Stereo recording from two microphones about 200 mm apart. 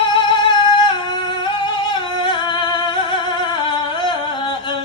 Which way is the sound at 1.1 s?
25° left (ahead or behind).